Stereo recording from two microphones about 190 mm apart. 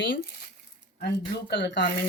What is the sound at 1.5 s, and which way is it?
Speech, 70° left (ahead or behind).